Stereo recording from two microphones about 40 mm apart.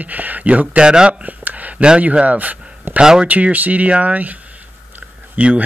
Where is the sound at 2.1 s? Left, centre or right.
Right.